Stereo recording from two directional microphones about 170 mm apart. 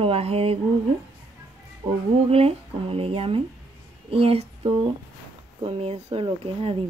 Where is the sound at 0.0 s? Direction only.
35° right (ahead or behind).